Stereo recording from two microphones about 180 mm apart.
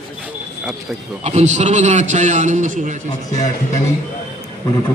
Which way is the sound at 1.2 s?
40° right (ahead or behind).